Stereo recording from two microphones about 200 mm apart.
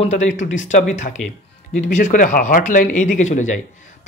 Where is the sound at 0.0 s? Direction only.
35° left (ahead or behind).